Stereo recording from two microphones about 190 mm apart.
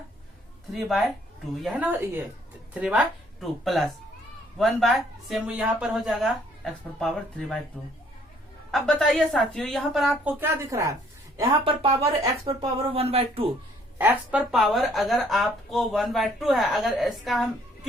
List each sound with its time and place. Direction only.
0.7 s a woman's voice: centre (ahead or behind)
8.7 s a woman's voice: 5° left (ahead or behind)
10.4 s speech: 15° right (ahead or behind)
11.6 s speech: 30° right (ahead or behind)
14.0 s a woman's voice: 10° right (ahead or behind)